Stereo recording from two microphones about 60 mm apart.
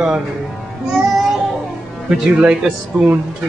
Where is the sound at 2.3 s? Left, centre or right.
Right.